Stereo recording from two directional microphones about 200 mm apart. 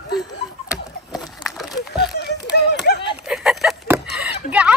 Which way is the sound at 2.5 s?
55° left (ahead or behind).